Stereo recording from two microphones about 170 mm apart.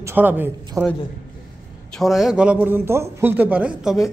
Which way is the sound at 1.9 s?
Centre (ahead or behind).